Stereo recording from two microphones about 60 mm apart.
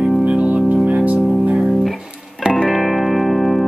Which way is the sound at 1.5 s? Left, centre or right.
Centre.